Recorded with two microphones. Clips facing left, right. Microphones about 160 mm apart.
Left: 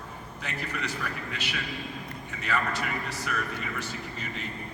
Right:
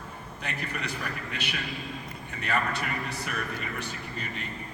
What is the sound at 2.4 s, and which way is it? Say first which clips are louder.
Speech: even; 60° right (ahead or behind).